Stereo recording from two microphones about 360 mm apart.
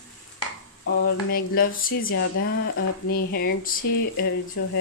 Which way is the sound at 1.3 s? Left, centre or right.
Left.